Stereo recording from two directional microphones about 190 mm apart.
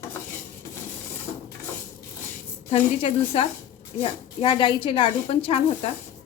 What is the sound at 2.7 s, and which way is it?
A woman's voice, 30° left (ahead or behind).